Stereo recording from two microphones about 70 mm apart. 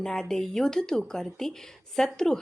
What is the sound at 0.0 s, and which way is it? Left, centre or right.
A woman's voice, centre.